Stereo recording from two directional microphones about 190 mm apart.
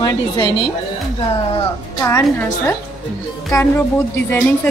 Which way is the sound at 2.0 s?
15° left (ahead or behind).